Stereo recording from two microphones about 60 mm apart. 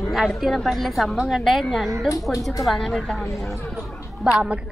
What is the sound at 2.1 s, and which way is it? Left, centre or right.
Speech, left.